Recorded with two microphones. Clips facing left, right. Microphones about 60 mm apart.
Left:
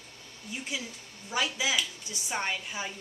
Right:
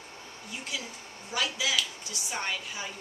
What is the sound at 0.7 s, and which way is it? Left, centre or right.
A woman's voice, left.